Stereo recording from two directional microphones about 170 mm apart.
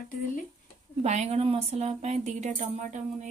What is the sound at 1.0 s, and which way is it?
A woman's voice, 40° right (ahead or behind).